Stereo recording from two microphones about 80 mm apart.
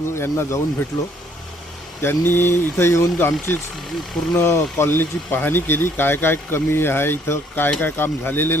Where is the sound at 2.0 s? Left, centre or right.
Left.